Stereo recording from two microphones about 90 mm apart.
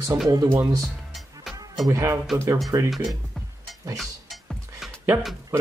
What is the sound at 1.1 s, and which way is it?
Music, centre (ahead or behind).